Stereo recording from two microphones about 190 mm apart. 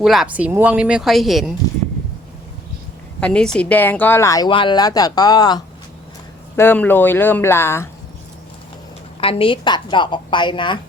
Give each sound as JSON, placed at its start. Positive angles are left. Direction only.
{"t": 0.0, "sound": "speech", "side_deg": 0}
{"t": 3.2, "sound": "speech", "side_deg": 5}
{"t": 6.6, "sound": "speech", "side_deg": 10}
{"t": 9.2, "sound": "speech", "side_deg": 30}